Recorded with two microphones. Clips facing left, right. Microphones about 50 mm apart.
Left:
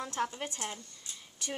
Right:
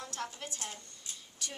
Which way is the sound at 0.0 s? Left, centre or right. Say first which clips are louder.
Left 6 dB; left.